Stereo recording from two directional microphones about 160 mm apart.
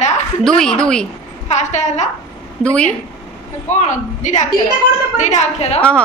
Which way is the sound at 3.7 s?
50° left (ahead or behind).